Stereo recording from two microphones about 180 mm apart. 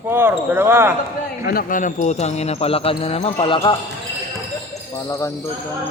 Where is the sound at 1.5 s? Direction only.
50° left (ahead or behind); by 3.6 s 30° left (ahead or behind).